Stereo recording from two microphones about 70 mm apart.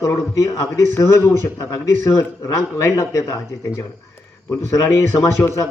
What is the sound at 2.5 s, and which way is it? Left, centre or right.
Speech, left.